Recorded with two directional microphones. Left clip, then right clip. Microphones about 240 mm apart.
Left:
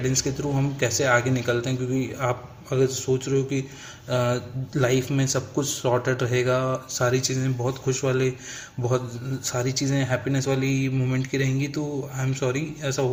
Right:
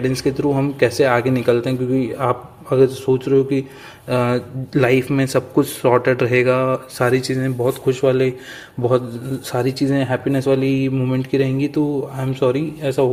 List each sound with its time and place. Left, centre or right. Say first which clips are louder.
0.0 s speech: right 7 dB; right
9.5 s speech: right 7 dB; right